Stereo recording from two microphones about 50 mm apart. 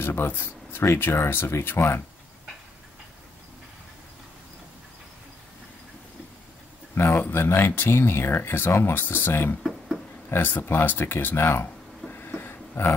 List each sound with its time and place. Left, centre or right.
0.0 s speech: left
7.0 s speech: left
8.9 s speech: left
9.6 s a sound: centre
10.3 s speech: left
12.1 s a sound: left